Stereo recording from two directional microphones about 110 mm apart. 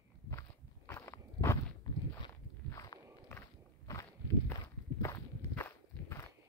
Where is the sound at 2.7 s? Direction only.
30° left (ahead or behind).